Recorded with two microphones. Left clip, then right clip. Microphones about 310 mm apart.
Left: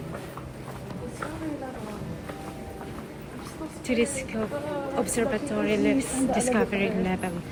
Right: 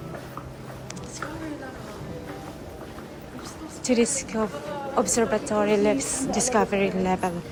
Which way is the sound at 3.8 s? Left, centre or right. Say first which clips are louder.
Right 3 dB; centre.